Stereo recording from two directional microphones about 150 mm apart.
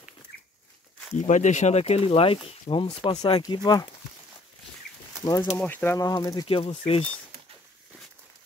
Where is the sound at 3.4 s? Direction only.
25° left (ahead or behind).